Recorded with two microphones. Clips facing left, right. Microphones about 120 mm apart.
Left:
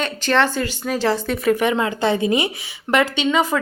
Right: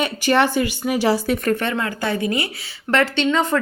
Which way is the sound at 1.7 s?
20° left (ahead or behind).